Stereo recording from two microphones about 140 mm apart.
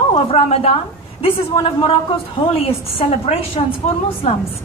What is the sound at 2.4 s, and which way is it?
A woman's voice, 40° left (ahead or behind).